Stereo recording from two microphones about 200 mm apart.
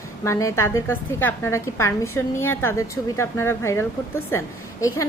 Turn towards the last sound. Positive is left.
turn(degrees=15)  # may be behind; listen again after turning